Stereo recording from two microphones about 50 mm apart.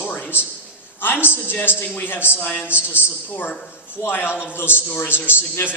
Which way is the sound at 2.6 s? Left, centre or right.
Right.